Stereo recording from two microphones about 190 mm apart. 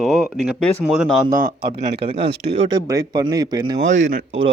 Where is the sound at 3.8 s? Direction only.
40° right (ahead or behind).